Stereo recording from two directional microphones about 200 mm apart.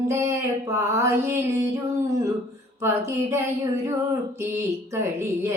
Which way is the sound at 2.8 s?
15° right (ahead or behind).